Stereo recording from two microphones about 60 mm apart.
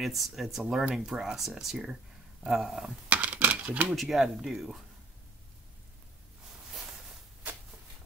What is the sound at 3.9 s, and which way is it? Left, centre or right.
Speech, centre.